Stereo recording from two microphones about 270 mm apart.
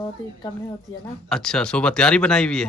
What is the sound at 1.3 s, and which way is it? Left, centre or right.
Speech, centre.